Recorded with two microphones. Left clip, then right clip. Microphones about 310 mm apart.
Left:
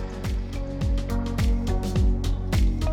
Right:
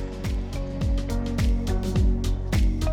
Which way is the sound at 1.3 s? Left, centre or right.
Centre.